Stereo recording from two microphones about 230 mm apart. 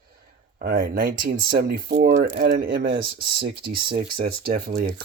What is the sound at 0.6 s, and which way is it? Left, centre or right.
Speech, right.